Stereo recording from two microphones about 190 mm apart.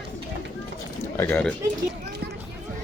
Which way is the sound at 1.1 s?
10° left (ahead or behind).